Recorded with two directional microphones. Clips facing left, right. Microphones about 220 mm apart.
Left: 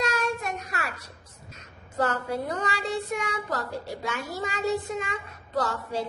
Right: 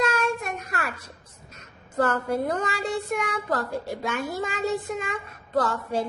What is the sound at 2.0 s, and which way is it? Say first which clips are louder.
Speech: right 3 dB; 50° right (ahead or behind).